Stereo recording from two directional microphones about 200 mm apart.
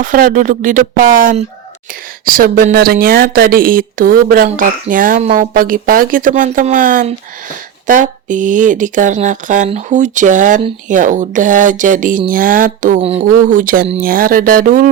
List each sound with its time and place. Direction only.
0.0 s speech: 40° right (ahead or behind)